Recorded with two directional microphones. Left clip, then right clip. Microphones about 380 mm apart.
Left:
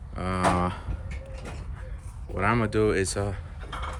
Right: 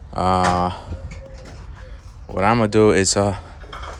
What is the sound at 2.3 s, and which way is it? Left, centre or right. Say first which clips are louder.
Speech: right 9 dB; centre.